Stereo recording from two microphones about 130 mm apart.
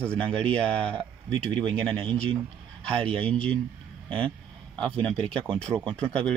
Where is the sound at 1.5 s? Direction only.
40° right (ahead or behind).